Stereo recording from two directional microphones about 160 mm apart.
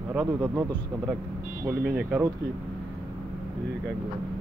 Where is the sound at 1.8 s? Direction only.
5° right (ahead or behind).